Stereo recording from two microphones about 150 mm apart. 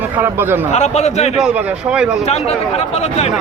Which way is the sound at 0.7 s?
50° left (ahead or behind).